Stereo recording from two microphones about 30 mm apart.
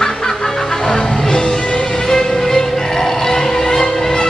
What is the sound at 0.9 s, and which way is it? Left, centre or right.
Music, left.